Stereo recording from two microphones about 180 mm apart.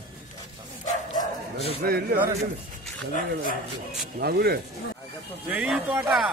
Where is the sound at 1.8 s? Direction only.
55° right (ahead or behind).